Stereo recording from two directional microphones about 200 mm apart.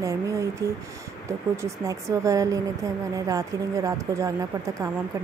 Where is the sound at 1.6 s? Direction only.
15° right (ahead or behind).